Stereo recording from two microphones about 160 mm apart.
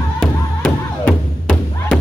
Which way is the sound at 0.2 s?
5° left (ahead or behind).